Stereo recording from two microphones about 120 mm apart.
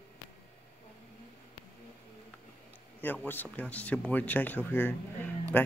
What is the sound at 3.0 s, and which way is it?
Speech, 15° left (ahead or behind).